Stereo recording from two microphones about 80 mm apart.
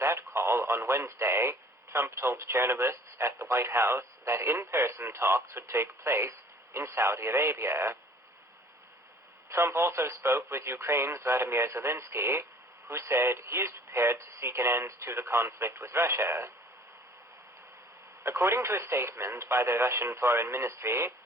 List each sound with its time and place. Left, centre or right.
0.0 s speech: right
9.5 s speech: right
18.2 s speech: right